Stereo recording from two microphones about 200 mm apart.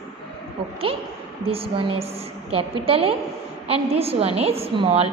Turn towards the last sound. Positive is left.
turn(degrees=-30)  # may be behind; listen again after turning